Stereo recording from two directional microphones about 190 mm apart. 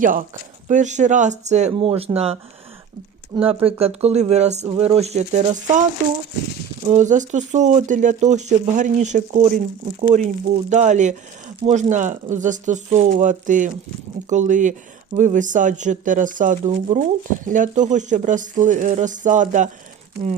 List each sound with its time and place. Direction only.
0.0 s speech: 45° right (ahead or behind)
6.8 s speech: 40° right (ahead or behind)